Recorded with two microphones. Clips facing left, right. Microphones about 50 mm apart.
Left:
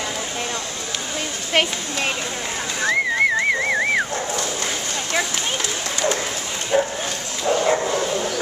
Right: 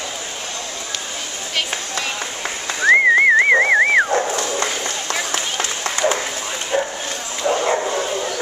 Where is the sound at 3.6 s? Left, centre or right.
Right.